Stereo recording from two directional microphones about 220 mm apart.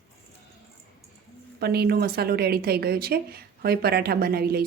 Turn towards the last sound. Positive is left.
turn(degrees=-45)  # may be behind; listen again after turning